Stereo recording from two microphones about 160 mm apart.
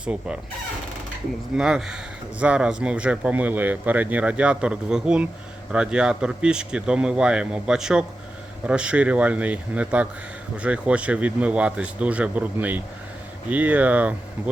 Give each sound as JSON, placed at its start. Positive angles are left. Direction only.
{"t": 0.0, "sound": "speech", "side_deg": -5}
{"t": 1.5, "sound": "speech", "side_deg": -5}